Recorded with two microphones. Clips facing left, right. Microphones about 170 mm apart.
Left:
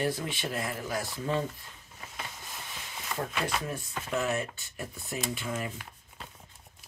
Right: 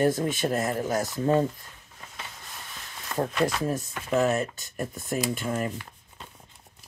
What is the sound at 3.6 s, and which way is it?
Speech, 40° right (ahead or behind).